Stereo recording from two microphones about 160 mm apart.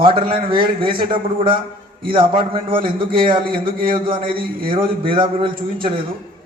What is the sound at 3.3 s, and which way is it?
Speech, 70° right (ahead or behind).